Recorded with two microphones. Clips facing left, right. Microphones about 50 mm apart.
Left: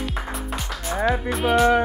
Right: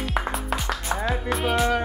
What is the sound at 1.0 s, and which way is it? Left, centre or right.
Music, centre.